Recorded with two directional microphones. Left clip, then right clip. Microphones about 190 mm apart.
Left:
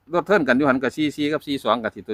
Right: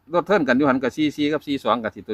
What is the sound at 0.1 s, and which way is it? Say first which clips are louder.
Speech: even; 20° left (ahead or behind).